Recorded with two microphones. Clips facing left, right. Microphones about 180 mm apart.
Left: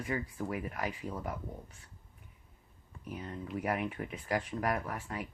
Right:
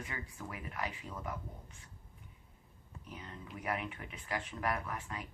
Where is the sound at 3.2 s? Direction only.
35° left (ahead or behind).